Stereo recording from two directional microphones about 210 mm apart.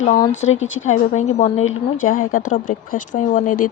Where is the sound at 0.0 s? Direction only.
35° left (ahead or behind).